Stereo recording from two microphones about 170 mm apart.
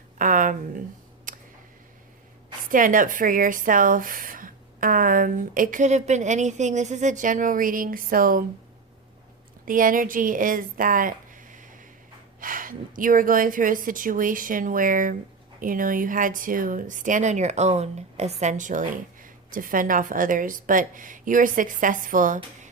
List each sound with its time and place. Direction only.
0.2 s a sound: 50° right (ahead or behind)
2.6 s a woman's voice: 50° right (ahead or behind)
9.6 s a woman's voice: 55° right (ahead or behind)